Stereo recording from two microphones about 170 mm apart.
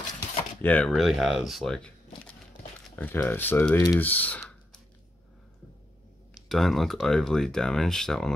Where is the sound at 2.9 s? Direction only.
10° left (ahead or behind).